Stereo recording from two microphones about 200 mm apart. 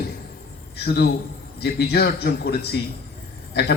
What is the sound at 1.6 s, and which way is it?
A man's voice, 55° left (ahead or behind).